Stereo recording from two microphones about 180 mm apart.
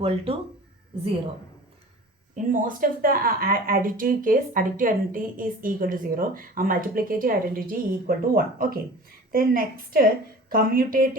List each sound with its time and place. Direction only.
2.3 s a woman's voice: 45° right (ahead or behind)